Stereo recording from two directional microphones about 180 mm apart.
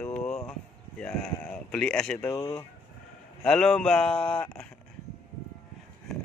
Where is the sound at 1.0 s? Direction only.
5° left (ahead or behind).